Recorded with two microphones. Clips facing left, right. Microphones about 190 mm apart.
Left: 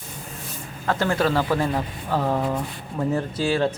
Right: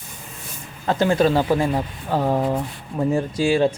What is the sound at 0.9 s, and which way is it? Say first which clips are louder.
Speech: right 4 dB; 20° right (ahead or behind).